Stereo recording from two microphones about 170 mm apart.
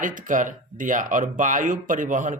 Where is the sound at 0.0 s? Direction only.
50° right (ahead or behind).